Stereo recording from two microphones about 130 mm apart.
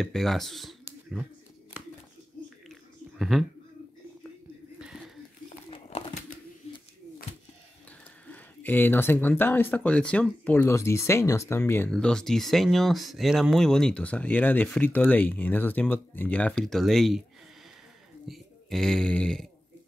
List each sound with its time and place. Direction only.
0.0 s speech: centre (ahead or behind)
2.7 s a sound: centre (ahead or behind)
4.7 s a sound: 5° right (ahead or behind)
5.7 s crumpling: 45° left (ahead or behind)
8.3 s speech: 15° left (ahead or behind)
11.9 s speech: 5° left (ahead or behind)
18.3 s speech: centre (ahead or behind)